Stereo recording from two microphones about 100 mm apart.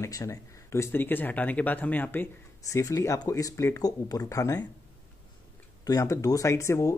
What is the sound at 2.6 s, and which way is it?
Speech, 35° left (ahead or behind).